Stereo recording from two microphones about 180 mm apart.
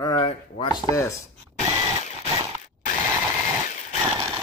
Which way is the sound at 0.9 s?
15° left (ahead or behind).